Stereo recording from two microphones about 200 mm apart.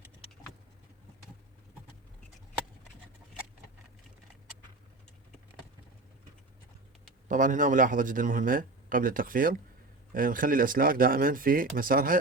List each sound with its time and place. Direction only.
7.3 s speech: 40° right (ahead or behind)